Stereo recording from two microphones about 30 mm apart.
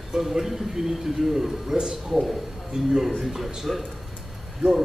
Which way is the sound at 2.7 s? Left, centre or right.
Right.